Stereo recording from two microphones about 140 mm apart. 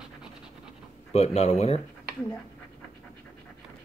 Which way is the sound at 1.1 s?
50° left (ahead or behind).